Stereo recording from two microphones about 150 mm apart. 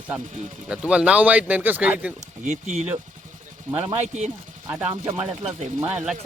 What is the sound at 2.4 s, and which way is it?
Speech, 50° right (ahead or behind).